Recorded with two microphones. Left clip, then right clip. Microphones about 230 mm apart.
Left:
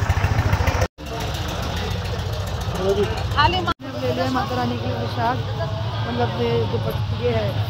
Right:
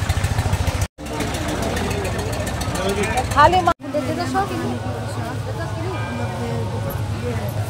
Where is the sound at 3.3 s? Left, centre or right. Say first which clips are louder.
Right 5 dB; right.